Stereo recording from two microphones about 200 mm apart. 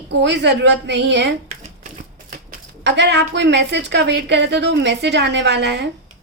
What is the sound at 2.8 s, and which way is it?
A woman's voice, 60° right (ahead or behind).